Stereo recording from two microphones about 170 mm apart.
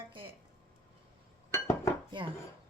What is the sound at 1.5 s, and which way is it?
Chink, 15° left (ahead or behind).